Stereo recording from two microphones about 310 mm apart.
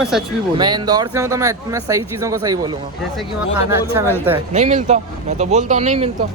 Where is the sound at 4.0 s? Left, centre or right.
Centre.